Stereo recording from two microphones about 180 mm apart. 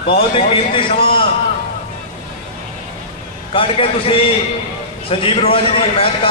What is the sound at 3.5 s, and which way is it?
A man's voice, 30° left (ahead or behind).